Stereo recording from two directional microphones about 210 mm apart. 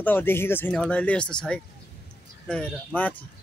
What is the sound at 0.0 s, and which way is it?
Speech, 10° left (ahead or behind).